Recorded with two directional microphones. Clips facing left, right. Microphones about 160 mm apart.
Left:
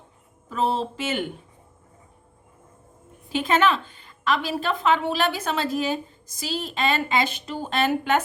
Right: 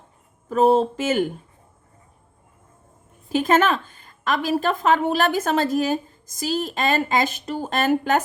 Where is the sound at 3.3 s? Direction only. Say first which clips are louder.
Right 3 dB; 45° right (ahead or behind).